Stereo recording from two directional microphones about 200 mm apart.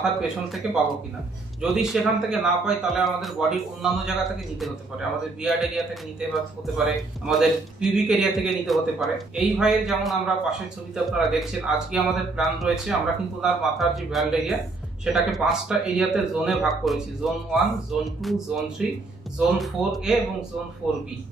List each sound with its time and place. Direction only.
0.0 s a man's voice: 5° right (ahead or behind)
1.6 s a man's voice: centre (ahead or behind)